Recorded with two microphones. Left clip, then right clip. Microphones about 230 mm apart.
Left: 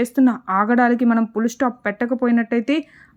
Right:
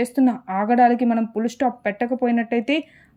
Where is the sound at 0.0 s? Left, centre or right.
Centre.